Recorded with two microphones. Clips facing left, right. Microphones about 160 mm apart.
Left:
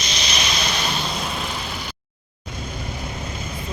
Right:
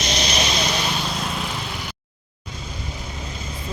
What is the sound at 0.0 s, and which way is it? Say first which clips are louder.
Vehicle: right 5 dB; 60° right (ahead or behind).